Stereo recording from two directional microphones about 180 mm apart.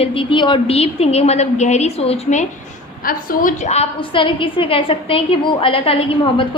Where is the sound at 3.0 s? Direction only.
50° left (ahead or behind).